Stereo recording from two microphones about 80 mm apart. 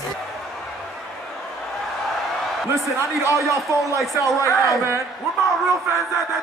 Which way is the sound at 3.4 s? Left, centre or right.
Right.